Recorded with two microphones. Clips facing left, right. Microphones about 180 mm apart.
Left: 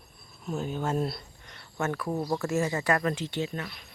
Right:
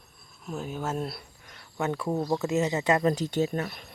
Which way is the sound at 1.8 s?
20° right (ahead or behind).